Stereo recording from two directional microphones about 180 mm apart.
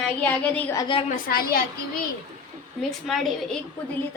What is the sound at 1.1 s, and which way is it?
Speech, 55° left (ahead or behind).